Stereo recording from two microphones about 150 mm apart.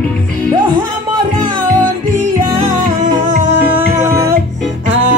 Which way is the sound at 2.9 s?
55° right (ahead or behind).